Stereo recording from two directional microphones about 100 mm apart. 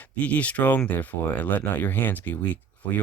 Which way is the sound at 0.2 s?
15° left (ahead or behind).